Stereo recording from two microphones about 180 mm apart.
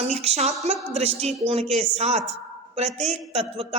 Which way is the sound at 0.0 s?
35° right (ahead or behind).